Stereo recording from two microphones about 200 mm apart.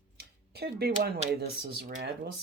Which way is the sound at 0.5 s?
50° right (ahead or behind).